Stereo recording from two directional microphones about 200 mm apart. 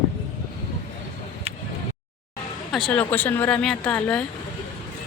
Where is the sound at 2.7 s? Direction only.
5° left (ahead or behind).